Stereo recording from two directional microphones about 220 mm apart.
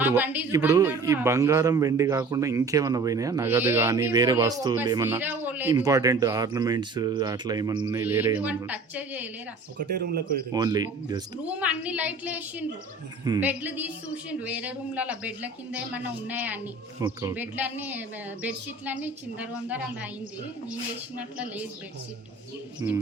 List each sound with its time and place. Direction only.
0.0 s a man's voice: 10° right (ahead or behind)
9.9 s speech: 45° right (ahead or behind)
10.5 s a man's voice: 15° right (ahead or behind)
11.4 s a man's voice: 5° right (ahead or behind)
21.2 s a man's voice: 5° right (ahead or behind)
22.8 s a man's voice: 15° right (ahead or behind)